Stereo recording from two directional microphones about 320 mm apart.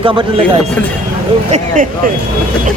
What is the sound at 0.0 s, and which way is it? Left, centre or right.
Speech, centre.